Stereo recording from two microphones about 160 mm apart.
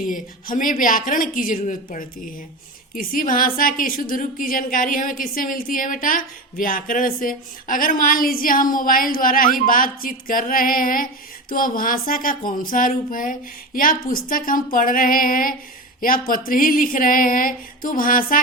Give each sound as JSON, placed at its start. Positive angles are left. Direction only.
{"t": 0.0, "sound": "a woman's voice", "side_deg": 55}